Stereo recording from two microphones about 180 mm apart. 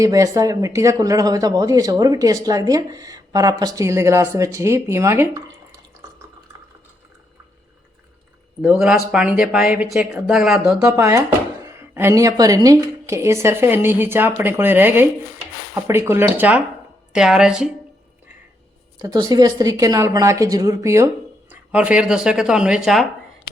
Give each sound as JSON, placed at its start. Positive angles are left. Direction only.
{"t": 0.0, "sound": "speech", "side_deg": -20}
{"t": 8.6, "sound": "speech", "side_deg": -5}
{"t": 10.8, "sound": "a woman's voice", "side_deg": -20}
{"t": 19.0, "sound": "speech", "side_deg": -25}